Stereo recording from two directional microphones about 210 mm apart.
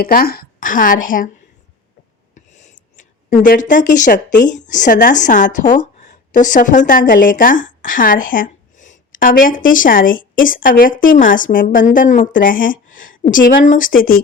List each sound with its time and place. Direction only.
0.0 s speech: 45° left (ahead or behind)
2.3 s a sound: 35° left (ahead or behind)
4.4 s speech: 35° left (ahead or behind)